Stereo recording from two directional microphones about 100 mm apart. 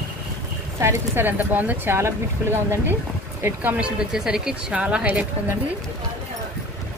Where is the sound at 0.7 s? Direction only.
25° right (ahead or behind).